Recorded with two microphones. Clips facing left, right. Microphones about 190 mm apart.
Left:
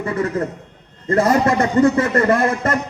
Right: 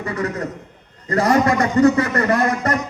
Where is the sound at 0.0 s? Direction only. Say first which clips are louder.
Left 3 dB; 25° left (ahead or behind).